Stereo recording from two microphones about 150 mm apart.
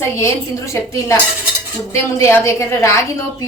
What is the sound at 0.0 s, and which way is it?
Speech, 20° left (ahead or behind).